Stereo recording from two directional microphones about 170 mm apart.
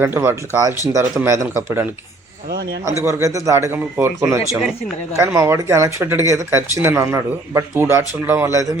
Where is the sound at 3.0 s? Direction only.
15° right (ahead or behind).